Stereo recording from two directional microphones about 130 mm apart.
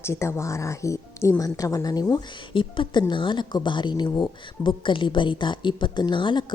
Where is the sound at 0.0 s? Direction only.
20° left (ahead or behind).